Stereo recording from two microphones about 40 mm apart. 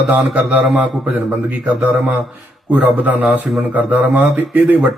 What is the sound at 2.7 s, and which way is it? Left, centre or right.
Speech, right.